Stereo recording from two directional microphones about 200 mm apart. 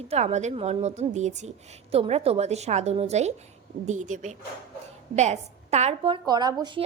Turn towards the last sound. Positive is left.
turn(degrees=-20)  # may be behind; listen again after turning